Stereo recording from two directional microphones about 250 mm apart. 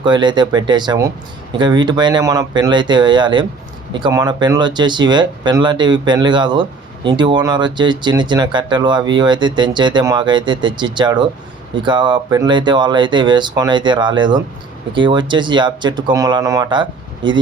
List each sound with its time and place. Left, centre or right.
0.0 s speech: centre